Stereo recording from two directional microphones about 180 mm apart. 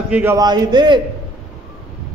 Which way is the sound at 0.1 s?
15° right (ahead or behind).